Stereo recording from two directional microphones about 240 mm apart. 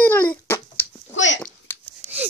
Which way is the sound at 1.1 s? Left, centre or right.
Left.